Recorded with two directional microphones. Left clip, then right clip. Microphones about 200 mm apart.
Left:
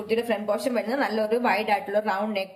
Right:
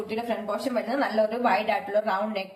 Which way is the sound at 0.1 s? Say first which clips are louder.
Left 6 dB; 55° left (ahead or behind).